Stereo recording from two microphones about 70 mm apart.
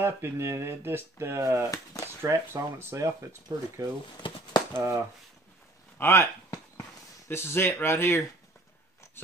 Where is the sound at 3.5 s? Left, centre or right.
Right.